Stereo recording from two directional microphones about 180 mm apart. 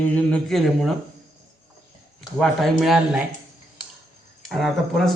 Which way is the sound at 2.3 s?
Centre (ahead or behind).